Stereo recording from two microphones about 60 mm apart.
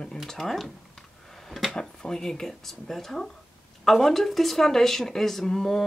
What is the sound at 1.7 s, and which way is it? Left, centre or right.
A woman's voice, centre.